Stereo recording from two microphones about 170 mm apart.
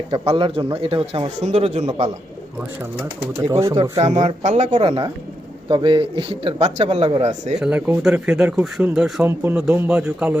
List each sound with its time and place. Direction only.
0.1 s speech: 30° right (ahead or behind)
3.0 s speech: 20° right (ahead or behind)
3.9 s speech: 40° right (ahead or behind)
7.6 s speech: 5° right (ahead or behind)